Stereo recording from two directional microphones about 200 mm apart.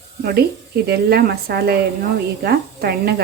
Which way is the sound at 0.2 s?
50° right (ahead or behind).